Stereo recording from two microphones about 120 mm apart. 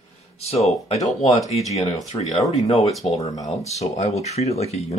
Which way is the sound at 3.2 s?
70° left (ahead or behind).